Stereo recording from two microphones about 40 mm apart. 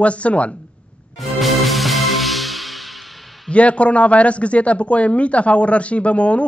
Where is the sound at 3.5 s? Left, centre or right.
Left.